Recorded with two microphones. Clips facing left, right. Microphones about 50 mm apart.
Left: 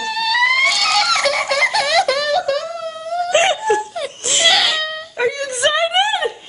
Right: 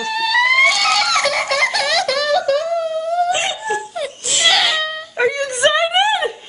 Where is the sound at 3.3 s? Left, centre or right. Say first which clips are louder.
Left 5 dB; left.